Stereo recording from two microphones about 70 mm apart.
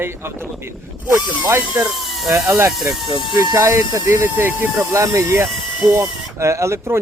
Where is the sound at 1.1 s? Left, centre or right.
Right.